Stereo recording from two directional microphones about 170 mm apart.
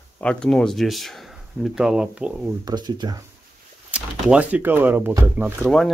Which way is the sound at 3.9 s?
10° right (ahead or behind).